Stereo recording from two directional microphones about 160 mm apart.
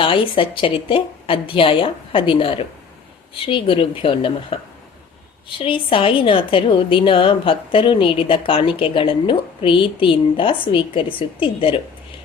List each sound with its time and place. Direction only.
0.0 s a woman's voice: 35° left (ahead or behind)